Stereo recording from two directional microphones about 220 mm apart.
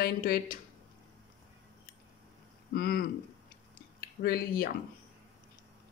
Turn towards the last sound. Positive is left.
turn(degrees=40)  # may be behind; listen again after turning